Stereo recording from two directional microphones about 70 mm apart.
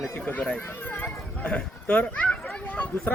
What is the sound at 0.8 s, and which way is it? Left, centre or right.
Run, left.